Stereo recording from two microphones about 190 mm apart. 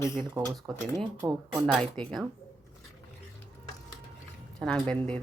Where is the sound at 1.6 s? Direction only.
5° left (ahead or behind).